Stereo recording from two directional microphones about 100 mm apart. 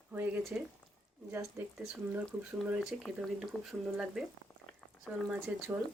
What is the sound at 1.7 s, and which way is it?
Speech, 10° right (ahead or behind).